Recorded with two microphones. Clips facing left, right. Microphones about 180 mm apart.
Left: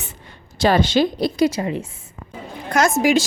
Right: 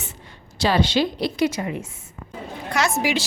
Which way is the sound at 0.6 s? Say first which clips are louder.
Left 4 dB; 50° left (ahead or behind).